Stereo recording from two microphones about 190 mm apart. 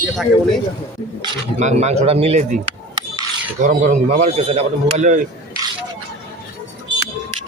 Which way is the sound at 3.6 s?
40° right (ahead or behind).